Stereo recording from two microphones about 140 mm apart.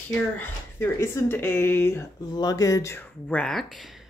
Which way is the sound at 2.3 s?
25° left (ahead or behind).